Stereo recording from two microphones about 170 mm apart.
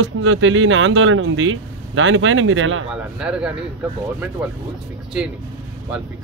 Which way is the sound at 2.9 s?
5° right (ahead or behind).